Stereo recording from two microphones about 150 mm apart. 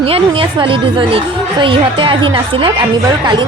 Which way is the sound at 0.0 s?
40° right (ahead or behind).